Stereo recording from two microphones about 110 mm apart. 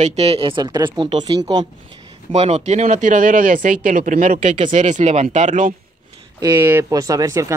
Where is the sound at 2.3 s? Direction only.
75° right (ahead or behind).